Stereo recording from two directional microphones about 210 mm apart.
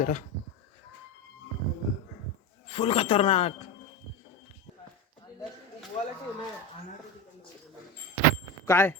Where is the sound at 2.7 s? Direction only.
25° left (ahead or behind).